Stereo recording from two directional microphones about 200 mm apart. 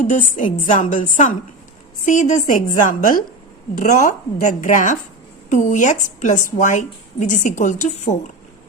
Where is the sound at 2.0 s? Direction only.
40° left (ahead or behind).